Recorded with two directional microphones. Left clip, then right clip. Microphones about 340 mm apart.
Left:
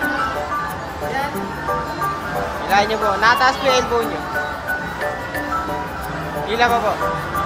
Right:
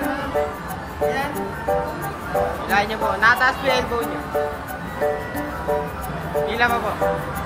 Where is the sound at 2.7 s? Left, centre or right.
Centre.